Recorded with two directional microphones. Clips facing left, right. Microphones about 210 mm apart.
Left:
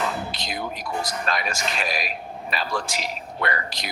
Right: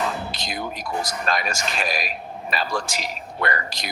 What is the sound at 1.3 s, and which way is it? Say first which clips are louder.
Speech: right 3 dB; 45° right (ahead or behind).